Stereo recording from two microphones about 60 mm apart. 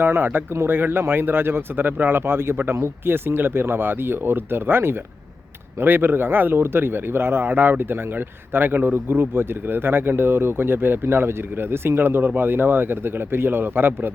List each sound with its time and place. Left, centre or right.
0.0 s speech: right